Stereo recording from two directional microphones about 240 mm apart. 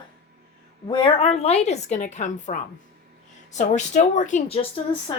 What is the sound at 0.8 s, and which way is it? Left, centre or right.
Speech, left.